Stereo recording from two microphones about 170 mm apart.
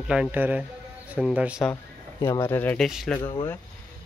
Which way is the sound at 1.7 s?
20° left (ahead or behind).